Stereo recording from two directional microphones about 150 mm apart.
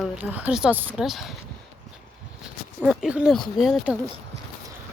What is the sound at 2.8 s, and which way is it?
Speech, 5° right (ahead or behind).